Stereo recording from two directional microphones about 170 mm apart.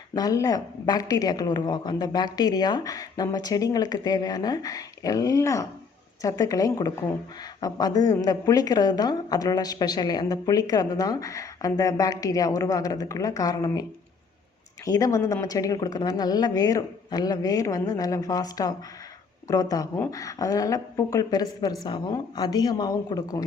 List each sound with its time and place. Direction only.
0.1 s a woman's voice: 20° left (ahead or behind)
14.8 s a woman's voice: 20° left (ahead or behind)